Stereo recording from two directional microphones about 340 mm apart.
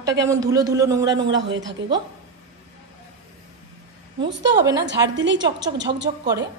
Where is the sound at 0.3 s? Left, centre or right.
Centre.